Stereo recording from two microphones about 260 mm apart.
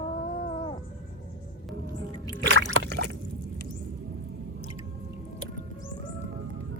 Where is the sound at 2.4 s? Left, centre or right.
Right.